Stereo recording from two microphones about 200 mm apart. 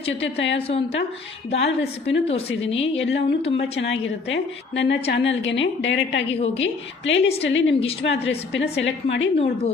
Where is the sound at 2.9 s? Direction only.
65° left (ahead or behind).